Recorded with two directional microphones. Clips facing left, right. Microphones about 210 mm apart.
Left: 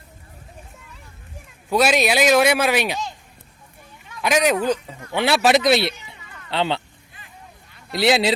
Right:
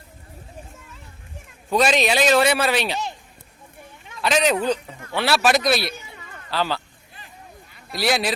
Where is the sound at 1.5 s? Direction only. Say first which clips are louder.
Left 1 dB; 10° left (ahead or behind).